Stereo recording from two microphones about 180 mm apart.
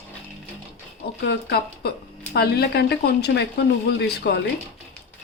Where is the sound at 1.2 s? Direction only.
65° left (ahead or behind).